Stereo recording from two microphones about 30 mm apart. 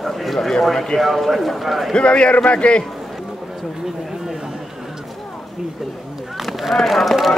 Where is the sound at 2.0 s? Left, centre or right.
Left.